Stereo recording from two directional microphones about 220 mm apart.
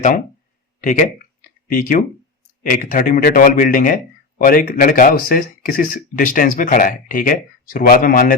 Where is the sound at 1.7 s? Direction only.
40° left (ahead or behind).